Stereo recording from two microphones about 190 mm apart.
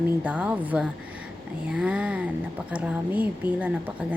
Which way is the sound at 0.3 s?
5° right (ahead or behind).